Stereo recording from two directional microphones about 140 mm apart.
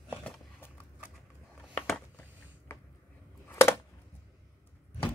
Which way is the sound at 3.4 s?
20° left (ahead or behind).